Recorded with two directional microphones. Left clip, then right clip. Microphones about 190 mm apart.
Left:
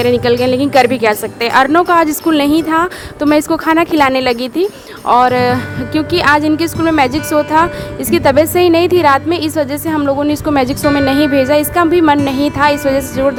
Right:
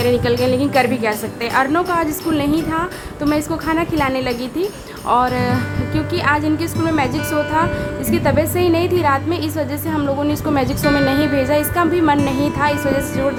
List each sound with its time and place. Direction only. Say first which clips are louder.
0.0 s a woman's voice: left 5 dB; 35° left (ahead or behind)